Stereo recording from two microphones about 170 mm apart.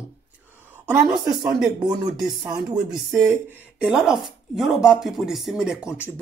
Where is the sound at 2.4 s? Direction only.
25° right (ahead or behind).